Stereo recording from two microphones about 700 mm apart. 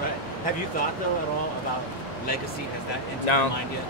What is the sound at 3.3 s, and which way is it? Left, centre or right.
Speech, left.